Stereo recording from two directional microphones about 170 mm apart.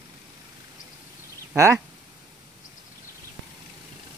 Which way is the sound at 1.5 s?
20° right (ahead or behind).